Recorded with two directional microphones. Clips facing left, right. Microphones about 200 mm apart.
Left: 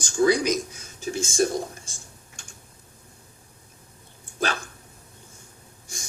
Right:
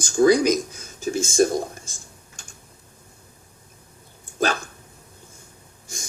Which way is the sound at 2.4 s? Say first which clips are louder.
Right 1 dB; 45° right (ahead or behind).